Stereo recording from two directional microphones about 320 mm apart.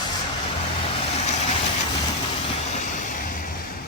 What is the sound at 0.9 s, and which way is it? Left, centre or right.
Vehicle, centre.